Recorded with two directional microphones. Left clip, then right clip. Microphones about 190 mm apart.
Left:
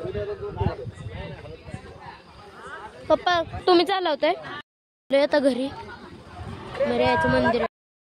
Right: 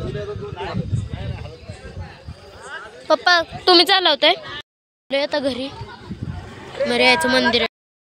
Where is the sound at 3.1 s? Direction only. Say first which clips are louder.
Right 5 dB; 5° left (ahead or behind).